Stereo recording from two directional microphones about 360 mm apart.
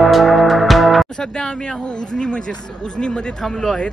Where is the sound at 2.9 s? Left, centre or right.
Centre.